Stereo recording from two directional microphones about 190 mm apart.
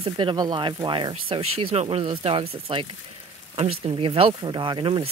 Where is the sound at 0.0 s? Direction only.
25° right (ahead or behind).